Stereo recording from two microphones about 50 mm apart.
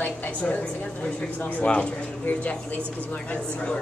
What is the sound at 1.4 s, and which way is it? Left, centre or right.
A man's voice, left.